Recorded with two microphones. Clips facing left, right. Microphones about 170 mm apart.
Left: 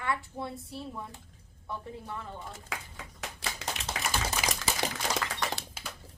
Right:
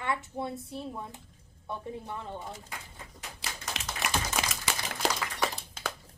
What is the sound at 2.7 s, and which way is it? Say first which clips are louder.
Clapping: left 4 dB; 90° left.